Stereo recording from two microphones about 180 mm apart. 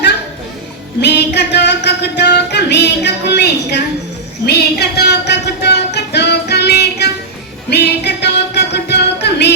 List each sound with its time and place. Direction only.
1.0 s music: 70° left (ahead or behind)